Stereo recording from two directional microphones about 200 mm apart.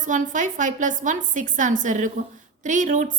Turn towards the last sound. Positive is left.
turn(degrees=-40)  # may be behind; listen again after turning